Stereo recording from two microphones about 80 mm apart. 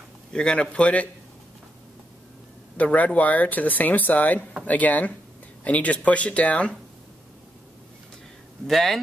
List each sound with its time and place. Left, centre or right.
0.3 s speech: centre
2.8 s speech: centre
8.6 s speech: centre